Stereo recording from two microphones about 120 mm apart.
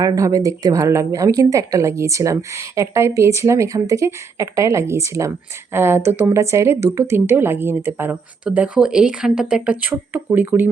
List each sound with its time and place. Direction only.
0.0 s speech: 30° right (ahead or behind)